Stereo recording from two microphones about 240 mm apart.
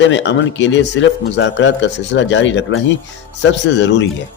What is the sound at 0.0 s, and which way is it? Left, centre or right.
Speech, left.